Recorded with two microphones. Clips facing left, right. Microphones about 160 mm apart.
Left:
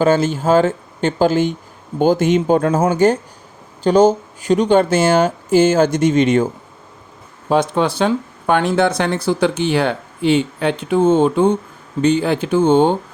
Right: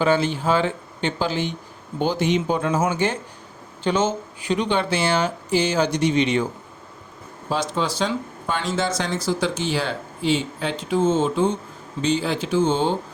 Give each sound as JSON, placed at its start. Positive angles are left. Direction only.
{"t": 0.0, "sound": "speech", "side_deg": 45}
{"t": 7.5, "sound": "speech", "side_deg": 55}